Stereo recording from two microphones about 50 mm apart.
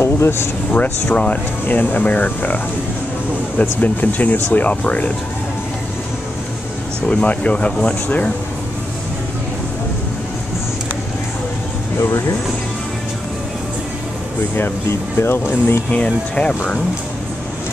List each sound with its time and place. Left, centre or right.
0.0 s speech: left
0.7 s speech: left
1.7 s speech: left
7.1 s speech: left
12.0 s speech: left
14.9 s speech: left
15.9 s speech: left